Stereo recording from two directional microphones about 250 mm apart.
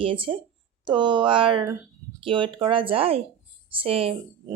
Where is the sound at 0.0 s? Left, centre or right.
Right.